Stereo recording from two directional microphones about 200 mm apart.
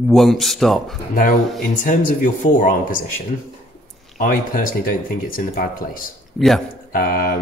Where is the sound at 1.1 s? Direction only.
45° left (ahead or behind).